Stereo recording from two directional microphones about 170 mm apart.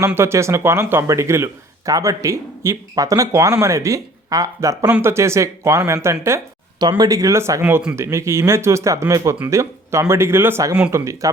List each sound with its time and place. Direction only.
0.0 s speech: 15° right (ahead or behind)